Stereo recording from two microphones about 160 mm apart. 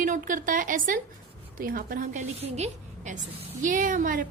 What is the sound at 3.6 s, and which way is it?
Speech, 55° right (ahead or behind).